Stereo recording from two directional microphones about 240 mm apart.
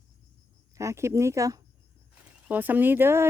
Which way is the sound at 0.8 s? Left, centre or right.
Centre.